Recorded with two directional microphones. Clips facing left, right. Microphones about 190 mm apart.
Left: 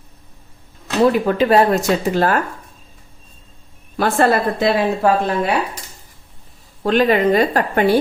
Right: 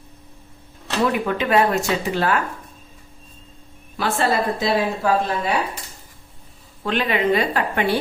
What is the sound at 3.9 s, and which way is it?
Speech, 50° left (ahead or behind).